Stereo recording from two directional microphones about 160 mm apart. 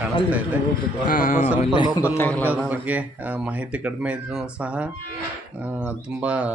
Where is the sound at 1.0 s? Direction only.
55° left (ahead or behind).